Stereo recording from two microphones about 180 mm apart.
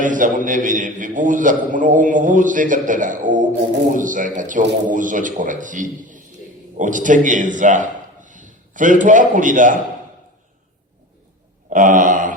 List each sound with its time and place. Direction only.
0.0 s a man's voice: 45° right (ahead or behind)
11.7 s a man's voice: 45° right (ahead or behind)